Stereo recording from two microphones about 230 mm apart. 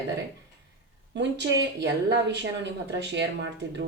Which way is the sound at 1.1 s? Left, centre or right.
Right.